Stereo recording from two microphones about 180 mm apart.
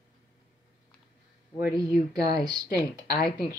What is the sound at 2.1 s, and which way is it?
Speech, 20° right (ahead or behind).